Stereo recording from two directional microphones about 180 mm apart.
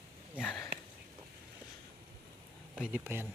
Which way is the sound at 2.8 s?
10° right (ahead or behind).